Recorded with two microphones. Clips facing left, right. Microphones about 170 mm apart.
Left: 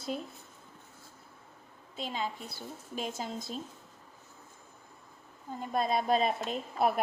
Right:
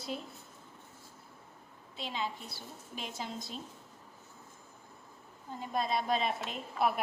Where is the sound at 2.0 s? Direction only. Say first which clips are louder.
Left 2 dB; 45° left (ahead or behind).